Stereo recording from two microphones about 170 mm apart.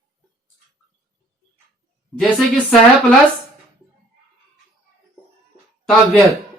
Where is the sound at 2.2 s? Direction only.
Centre (ahead or behind).